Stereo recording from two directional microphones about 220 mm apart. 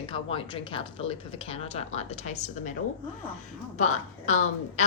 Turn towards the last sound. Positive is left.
turn(degrees=35)  # may be behind; listen again after turning